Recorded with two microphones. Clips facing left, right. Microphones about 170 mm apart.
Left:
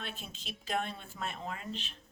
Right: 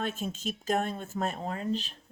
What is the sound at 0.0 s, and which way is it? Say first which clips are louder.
Speech: right 12 dB; 45° right (ahead or behind).